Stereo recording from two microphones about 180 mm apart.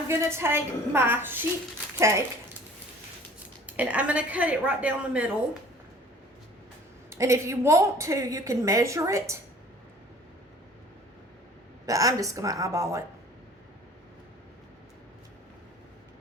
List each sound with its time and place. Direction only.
0.1 s a woman's voice: 15° right (ahead or behind)
3.7 s a woman's voice: 10° right (ahead or behind)
7.1 s a woman's voice: 15° right (ahead or behind)
11.9 s a woman's voice: 20° right (ahead or behind)